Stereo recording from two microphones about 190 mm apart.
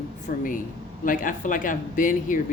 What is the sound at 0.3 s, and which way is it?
Speech, 45° left (ahead or behind).